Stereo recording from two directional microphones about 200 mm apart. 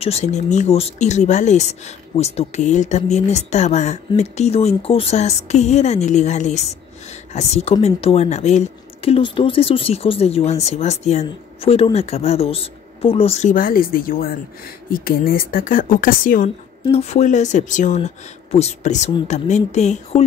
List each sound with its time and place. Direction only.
0.0 s speech: 35° left (ahead or behind)
16.8 s speech: 30° left (ahead or behind)